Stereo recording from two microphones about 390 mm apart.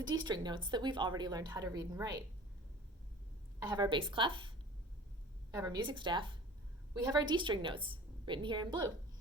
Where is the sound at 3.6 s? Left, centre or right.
Centre.